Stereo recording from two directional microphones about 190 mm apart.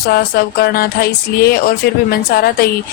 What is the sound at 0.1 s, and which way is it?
Speech, 55° left (ahead or behind).